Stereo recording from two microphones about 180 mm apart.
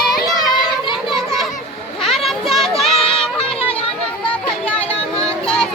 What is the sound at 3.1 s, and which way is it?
Music, 5° left (ahead or behind).